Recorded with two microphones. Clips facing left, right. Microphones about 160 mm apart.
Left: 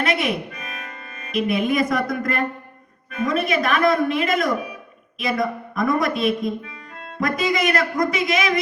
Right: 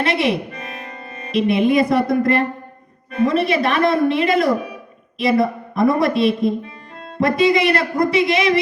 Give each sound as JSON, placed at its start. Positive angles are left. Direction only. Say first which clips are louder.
{"t": 0.0, "sound": "speech", "louder": "right 4 dB", "side_deg": -30}